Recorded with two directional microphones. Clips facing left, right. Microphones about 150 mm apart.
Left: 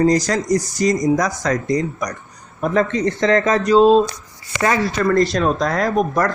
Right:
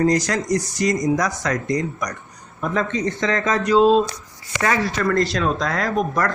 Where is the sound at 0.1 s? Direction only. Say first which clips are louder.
Left 3 dB; 35° left (ahead or behind).